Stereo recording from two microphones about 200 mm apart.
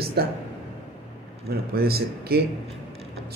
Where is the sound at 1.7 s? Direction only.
50° right (ahead or behind).